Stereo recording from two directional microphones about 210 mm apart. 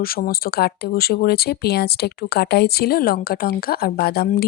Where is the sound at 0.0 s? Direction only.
45° left (ahead or behind).